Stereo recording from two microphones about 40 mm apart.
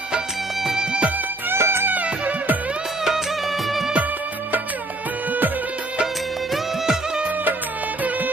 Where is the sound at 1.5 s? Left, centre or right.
Right.